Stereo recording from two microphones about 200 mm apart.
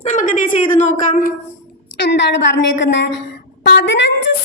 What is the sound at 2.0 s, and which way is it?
A woman's voice, 60° left (ahead or behind).